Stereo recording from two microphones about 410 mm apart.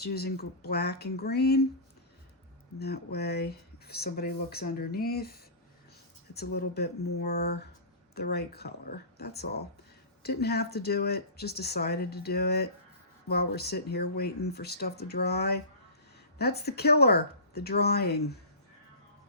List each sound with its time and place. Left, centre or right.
0.0 s speech: left
2.7 s speech: left